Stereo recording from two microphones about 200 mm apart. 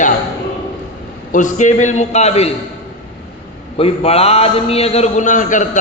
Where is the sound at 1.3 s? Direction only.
40° left (ahead or behind).